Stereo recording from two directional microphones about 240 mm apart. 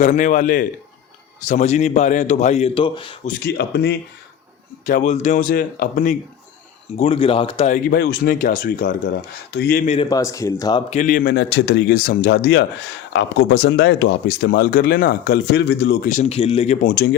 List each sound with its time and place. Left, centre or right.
0.0 s a man's voice: left
3.2 s speech: left
4.9 s speech: left
6.9 s a man's voice: left
7.9 s speech: left
10.1 s speech: centre
10.9 s speech: left